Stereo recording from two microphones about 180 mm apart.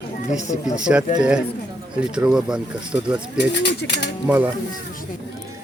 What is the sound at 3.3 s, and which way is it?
Speech, 70° left (ahead or behind).